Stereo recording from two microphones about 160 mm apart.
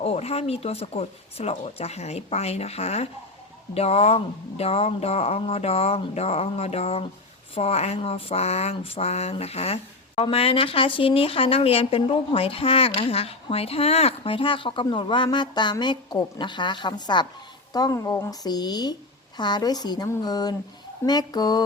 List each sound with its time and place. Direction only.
0.0 s speech: 40° left (ahead or behind)